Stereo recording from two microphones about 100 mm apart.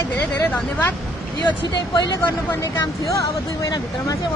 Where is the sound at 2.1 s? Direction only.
30° left (ahead or behind).